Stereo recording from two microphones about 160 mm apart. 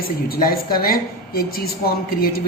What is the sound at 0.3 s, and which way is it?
A woman's voice, 65° left (ahead or behind).